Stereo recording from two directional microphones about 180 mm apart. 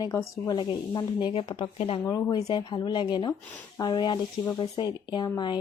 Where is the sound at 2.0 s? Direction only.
20° left (ahead or behind).